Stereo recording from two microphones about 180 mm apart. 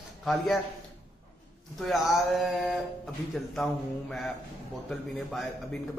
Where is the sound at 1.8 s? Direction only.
Centre (ahead or behind).